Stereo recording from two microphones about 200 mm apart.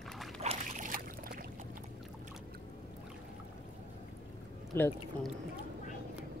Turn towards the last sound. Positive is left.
turn(degrees=10)  # may be behind; listen again after turning